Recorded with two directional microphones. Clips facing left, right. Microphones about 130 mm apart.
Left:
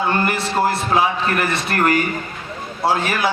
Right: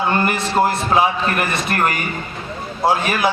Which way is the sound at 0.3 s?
20° right (ahead or behind).